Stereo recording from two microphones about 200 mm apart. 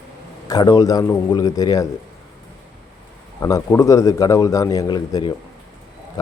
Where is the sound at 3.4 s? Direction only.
15° left (ahead or behind).